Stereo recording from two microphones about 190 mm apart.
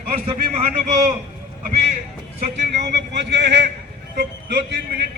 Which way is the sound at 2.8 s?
65° right (ahead or behind).